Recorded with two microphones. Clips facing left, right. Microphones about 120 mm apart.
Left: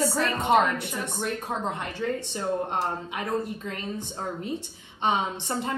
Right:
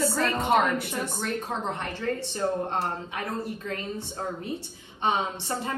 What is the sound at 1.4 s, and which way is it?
A woman's voice, 15° left (ahead or behind).